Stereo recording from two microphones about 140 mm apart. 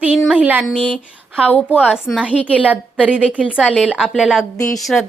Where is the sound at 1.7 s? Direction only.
5° right (ahead or behind).